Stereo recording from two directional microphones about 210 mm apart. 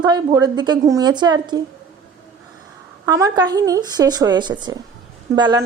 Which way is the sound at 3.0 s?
15° right (ahead or behind).